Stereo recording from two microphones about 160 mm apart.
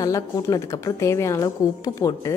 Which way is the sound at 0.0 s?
20° left (ahead or behind).